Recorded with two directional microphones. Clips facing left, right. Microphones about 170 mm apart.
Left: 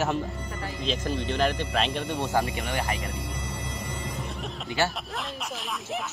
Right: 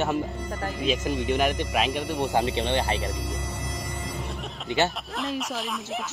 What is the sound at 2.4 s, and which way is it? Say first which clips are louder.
Speech: right 5 dB; 25° right (ahead or behind).